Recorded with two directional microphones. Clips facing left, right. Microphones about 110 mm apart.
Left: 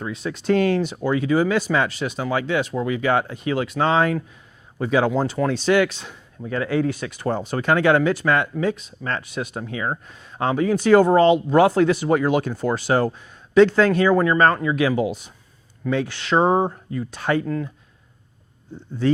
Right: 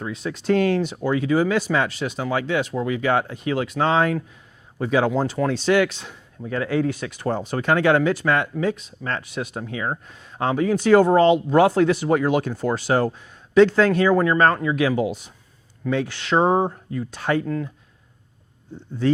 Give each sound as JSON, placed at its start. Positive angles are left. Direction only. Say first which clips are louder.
{"t": 0.0, "sound": "speech", "louder": "even", "side_deg": 15}